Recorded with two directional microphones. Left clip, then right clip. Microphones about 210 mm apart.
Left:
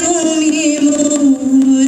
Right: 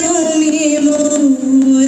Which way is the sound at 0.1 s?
20° left (ahead or behind).